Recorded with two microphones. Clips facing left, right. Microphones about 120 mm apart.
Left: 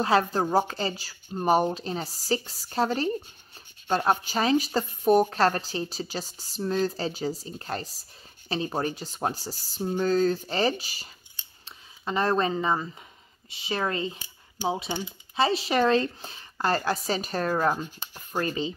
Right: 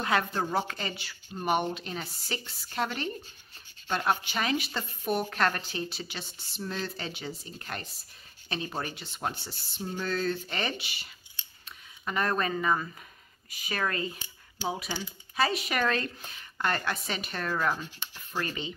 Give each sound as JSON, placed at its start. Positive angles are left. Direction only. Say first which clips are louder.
{"t": 0.0, "sound": "a woman's voice", "louder": "left 5 dB", "side_deg": 35}
{"t": 11.6, "sound": "a woman's voice", "louder": "left 3 dB", "side_deg": 25}